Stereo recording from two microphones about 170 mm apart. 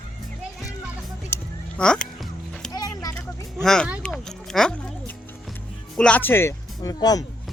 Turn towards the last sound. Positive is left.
turn(degrees=20)  # may be behind; listen again after turning